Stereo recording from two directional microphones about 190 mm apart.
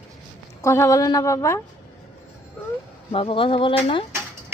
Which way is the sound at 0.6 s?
15° left (ahead or behind).